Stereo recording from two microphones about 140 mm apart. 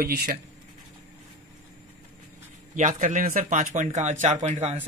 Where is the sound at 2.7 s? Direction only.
65° right (ahead or behind).